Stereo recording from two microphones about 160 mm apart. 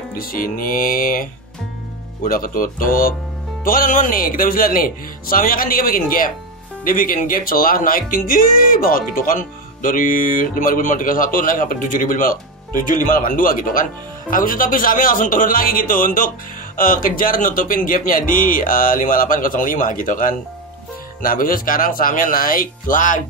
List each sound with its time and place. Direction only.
0.2 s speech: 65° left (ahead or behind)
2.2 s speech: 60° left (ahead or behind)